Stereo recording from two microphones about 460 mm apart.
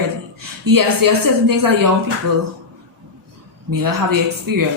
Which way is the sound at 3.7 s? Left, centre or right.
Right.